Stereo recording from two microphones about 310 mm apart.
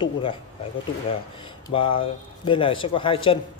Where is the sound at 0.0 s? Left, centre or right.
Centre.